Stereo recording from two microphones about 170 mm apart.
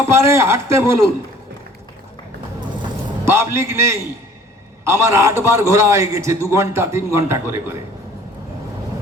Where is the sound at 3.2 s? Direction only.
15° right (ahead or behind).